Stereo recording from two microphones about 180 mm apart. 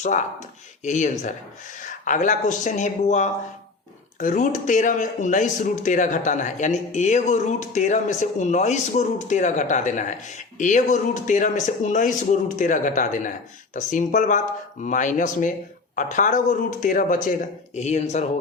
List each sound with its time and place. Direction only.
0.9 s a man's voice: 40° left (ahead or behind)